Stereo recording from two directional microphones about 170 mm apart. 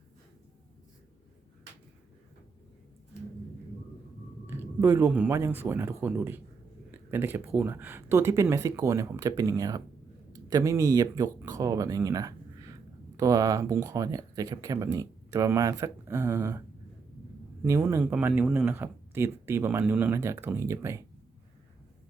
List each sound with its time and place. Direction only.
4.4 s speech: 15° right (ahead or behind)